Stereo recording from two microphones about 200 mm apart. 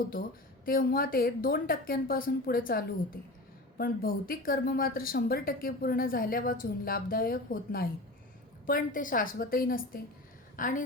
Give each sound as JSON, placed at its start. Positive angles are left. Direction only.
{"t": 0.6, "sound": "speech", "side_deg": 45}